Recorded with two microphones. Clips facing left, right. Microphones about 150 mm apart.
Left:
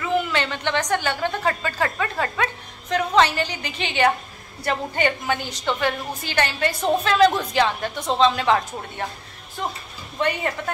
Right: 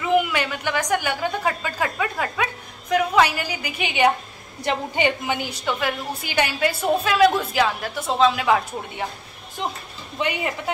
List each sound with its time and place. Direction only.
0.0 s a sound: 15° right (ahead or behind)
4.6 s a woman's voice: 15° right (ahead or behind)
9.6 s a woman's voice: 15° right (ahead or behind)